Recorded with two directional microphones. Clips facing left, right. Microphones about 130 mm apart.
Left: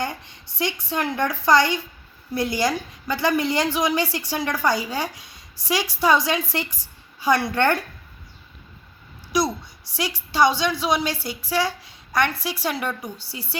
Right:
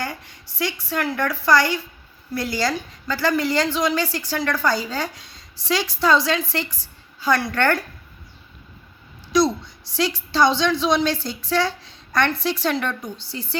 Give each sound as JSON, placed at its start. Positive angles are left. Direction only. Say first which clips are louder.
{"t": 0.0, "sound": "a woman's voice", "louder": "left 1 dB", "side_deg": 15}
{"t": 9.3, "sound": "a woman's voice", "louder": "right 4 dB", "side_deg": 10}